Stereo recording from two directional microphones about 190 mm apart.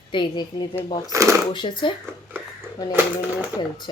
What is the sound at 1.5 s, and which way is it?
Speech, 25° left (ahead or behind).